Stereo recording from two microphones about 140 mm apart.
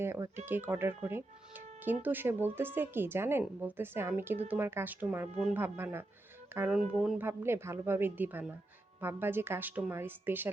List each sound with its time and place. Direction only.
0.0 s speech: 15° right (ahead or behind)
6.7 s speech: 5° right (ahead or behind)
7.2 s speech: 15° right (ahead or behind)